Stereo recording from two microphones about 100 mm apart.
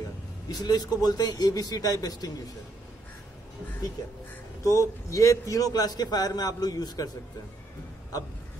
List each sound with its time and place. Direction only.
0.5 s a man's voice: 40° left (ahead or behind)
4.6 s a man's voice: 35° left (ahead or behind)